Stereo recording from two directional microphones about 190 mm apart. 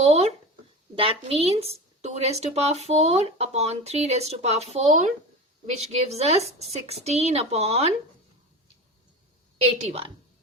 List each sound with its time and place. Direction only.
0.0 s a sound: 35° right (ahead or behind)
0.9 s speech: 30° right (ahead or behind)
9.8 s speech: 30° right (ahead or behind)